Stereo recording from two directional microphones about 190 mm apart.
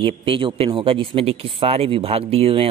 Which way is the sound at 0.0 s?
25° right (ahead or behind).